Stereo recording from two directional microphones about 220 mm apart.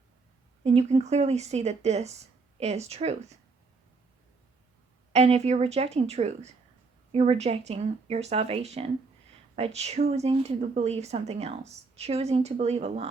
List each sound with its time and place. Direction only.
0.6 s speech: 30° right (ahead or behind)
5.1 s speech: 30° right (ahead or behind)